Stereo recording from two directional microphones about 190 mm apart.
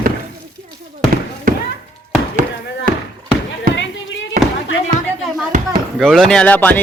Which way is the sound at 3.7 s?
80° left.